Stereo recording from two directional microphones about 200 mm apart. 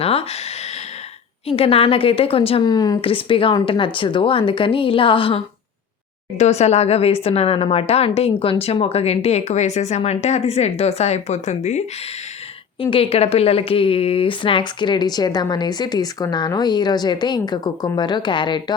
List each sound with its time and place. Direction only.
0.0 s a woman's voice: 30° left (ahead or behind)
1.5 s a woman's voice: 30° left (ahead or behind)
12.8 s a woman's voice: 25° left (ahead or behind)